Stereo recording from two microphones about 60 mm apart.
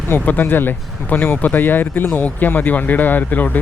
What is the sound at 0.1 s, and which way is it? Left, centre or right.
Speech, left.